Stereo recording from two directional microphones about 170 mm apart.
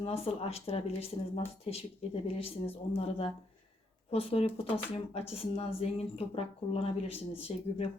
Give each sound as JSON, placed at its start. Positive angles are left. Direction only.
{"t": 0.0, "sound": "speech", "side_deg": 35}